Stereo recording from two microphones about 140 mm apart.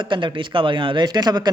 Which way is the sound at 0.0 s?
35° right (ahead or behind).